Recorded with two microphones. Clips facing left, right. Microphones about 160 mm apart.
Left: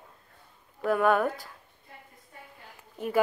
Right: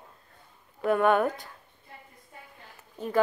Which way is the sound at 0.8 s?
Centre (ahead or behind).